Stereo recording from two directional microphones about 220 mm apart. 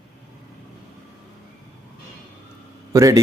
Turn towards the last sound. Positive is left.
turn(degrees=-15)  # may be behind; listen again after turning